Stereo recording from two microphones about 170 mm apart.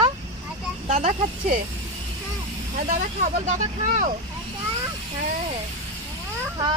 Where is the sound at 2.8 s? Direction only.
50° right (ahead or behind).